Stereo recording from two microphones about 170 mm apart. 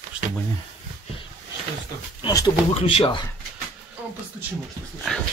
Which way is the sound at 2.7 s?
35° left (ahead or behind).